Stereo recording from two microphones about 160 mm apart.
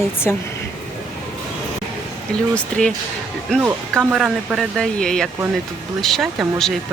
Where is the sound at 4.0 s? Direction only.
10° right (ahead or behind).